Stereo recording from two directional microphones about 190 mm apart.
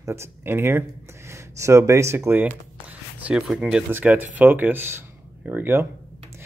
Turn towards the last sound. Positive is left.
turn(degrees=-10)  # may be behind; listen again after turning